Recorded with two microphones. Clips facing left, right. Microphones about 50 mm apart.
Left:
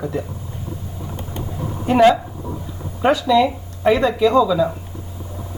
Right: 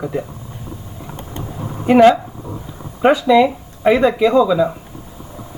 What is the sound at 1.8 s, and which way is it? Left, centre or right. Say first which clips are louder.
Speech: right 3 dB; right.